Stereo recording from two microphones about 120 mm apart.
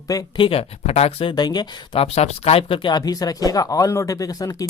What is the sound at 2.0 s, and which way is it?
Speech, 60° left (ahead or behind).